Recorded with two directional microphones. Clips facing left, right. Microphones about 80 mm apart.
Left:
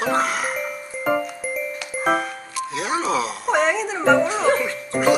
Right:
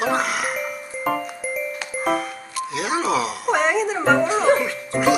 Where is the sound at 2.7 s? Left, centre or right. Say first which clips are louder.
Even; left.